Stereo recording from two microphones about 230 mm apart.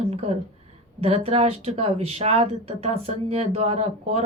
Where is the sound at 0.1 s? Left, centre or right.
Right.